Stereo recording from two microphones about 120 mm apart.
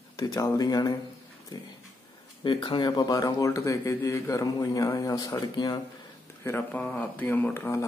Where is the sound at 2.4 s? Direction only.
45° left (ahead or behind).